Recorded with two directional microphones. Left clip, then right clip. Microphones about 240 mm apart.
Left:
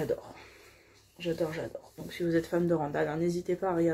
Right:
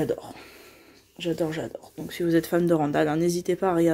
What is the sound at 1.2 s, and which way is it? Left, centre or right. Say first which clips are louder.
Speech: right 5 dB; right.